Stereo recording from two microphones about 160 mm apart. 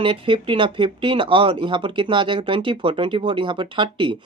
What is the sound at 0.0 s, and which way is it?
Speech, 35° right (ahead or behind).